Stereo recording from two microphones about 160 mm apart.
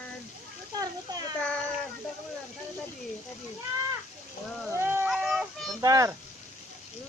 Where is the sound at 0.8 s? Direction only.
25° right (ahead or behind).